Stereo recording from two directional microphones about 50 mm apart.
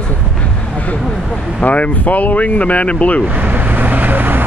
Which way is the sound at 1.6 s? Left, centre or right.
Left.